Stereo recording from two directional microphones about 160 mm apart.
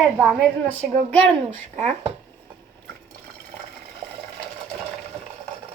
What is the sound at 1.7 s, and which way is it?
Speech, 45° right (ahead or behind).